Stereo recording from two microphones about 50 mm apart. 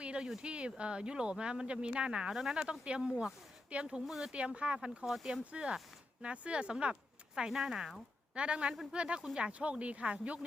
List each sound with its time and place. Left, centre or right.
0.0 s a sound: right
0.4 s speech: right
4.0 s speech: centre
4.3 s speech: right
5.0 s speech: centre
5.5 s speech: right
8.4 s speech: right